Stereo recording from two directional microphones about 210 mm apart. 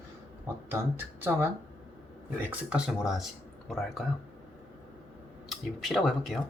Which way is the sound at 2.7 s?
5° right (ahead or behind).